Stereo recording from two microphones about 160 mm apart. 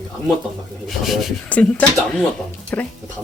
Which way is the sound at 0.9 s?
Centre (ahead or behind).